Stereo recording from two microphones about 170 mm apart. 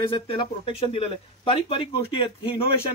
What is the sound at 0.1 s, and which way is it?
Speech, 30° left (ahead or behind).